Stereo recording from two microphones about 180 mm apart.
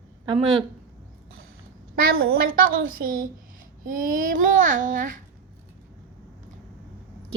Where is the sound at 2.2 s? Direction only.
90° right.